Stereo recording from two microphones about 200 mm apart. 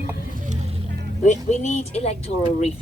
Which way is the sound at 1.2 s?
35° left (ahead or behind).